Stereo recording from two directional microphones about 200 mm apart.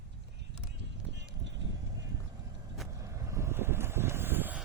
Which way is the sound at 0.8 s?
65° right (ahead or behind).